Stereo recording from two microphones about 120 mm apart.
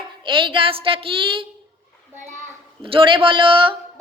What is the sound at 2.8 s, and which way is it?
Speech, 45° right (ahead or behind).